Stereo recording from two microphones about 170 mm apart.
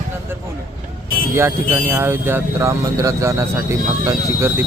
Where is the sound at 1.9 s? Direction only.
15° right (ahead or behind).